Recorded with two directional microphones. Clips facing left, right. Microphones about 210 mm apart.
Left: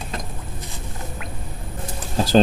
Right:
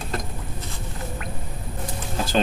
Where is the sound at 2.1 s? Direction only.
35° left (ahead or behind).